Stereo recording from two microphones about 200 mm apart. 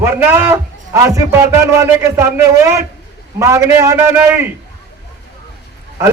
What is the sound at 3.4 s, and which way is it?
A man's voice, 15° right (ahead or behind).